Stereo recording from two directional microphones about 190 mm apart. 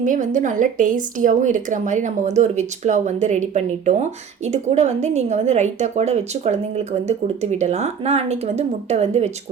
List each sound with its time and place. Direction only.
0.0 s speech: 45° right (ahead or behind)